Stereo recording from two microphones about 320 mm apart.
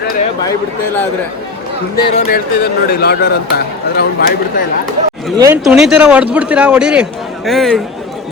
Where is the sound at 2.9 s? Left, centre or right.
Left.